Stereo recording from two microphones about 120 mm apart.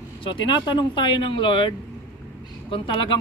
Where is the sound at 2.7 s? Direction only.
45° left (ahead or behind).